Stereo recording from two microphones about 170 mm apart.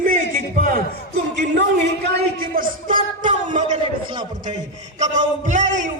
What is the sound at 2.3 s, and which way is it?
Speech, 55° right (ahead or behind).